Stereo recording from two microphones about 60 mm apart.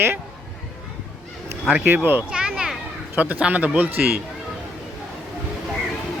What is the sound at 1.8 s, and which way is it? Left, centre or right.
Speech, right.